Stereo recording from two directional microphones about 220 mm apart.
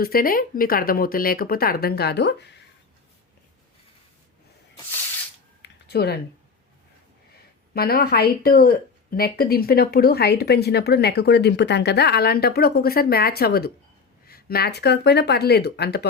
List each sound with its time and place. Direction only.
0.0 s speech: 40° left (ahead or behind)
5.6 s a sound: 45° left (ahead or behind)
7.7 s speech: 45° left (ahead or behind)